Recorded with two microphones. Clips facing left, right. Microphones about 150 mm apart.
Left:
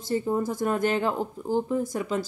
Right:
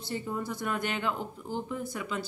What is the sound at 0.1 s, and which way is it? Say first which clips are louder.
Speech: left 8 dB; 40° left (ahead or behind).